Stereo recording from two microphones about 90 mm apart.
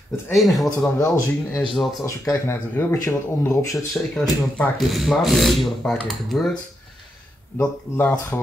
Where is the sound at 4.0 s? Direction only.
20° left (ahead or behind).